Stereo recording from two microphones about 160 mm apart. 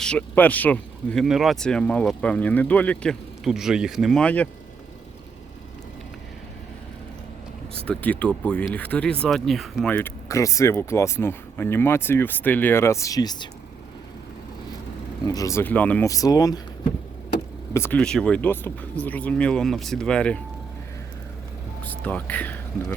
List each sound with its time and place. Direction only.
0.0 s speech: 10° left (ahead or behind)
7.9 s speech: 10° left (ahead or behind)
10.2 s speech: 20° left (ahead or behind)
15.3 s speech: 20° left (ahead or behind)
16.0 s speech: 20° left (ahead or behind)
17.7 s speech: 10° left (ahead or behind)
21.8 s speech: 10° left (ahead or behind)